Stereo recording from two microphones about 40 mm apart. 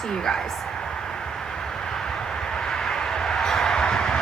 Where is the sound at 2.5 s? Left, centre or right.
Centre.